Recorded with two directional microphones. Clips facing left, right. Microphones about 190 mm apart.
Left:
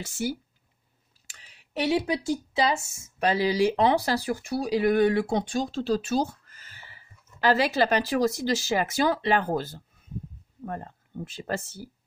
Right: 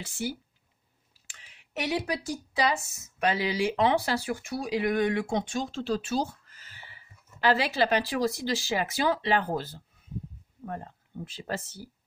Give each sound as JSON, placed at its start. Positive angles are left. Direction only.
{"t": 0.0, "sound": "speech", "side_deg": 45}